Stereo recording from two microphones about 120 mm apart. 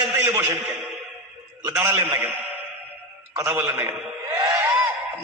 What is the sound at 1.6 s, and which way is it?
Speech, 20° right (ahead or behind).